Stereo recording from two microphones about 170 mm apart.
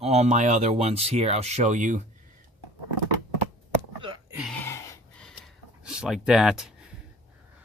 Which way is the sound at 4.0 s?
30° right (ahead or behind).